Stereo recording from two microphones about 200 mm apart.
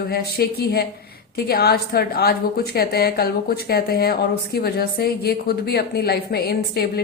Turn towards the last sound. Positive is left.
turn(degrees=50)  # may be behind; listen again after turning